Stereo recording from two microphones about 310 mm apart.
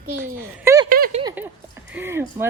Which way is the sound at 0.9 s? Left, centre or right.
Right.